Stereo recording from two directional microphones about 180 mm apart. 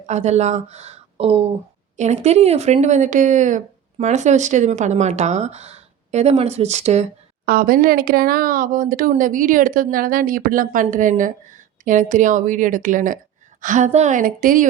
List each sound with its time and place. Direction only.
0.0 s speech: 40° right (ahead or behind)
7.4 s speech: 55° right (ahead or behind)